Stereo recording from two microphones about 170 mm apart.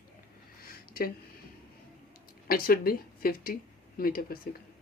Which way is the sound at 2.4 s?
60° left (ahead or behind).